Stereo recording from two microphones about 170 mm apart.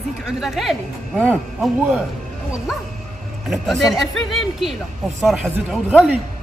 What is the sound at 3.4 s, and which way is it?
A woman's voice, centre (ahead or behind).